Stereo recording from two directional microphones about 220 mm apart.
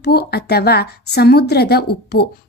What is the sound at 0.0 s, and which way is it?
A woman's voice, 45° left (ahead or behind).